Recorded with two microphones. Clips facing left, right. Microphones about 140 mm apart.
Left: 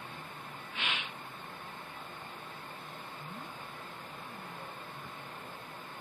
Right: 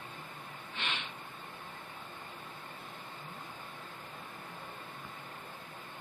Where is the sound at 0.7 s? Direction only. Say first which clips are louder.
Left 1 dB; 5° left (ahead or behind).